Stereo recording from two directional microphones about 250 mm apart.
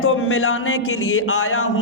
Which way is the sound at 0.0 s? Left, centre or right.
Left.